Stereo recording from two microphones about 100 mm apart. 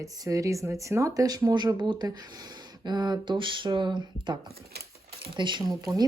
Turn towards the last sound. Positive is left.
turn(degrees=-50)  # may be behind; listen again after turning